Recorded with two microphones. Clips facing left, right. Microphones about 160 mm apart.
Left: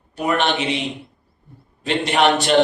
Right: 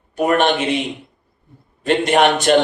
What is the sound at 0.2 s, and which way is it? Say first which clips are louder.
Speech: right 4 dB; 50° right (ahead or behind).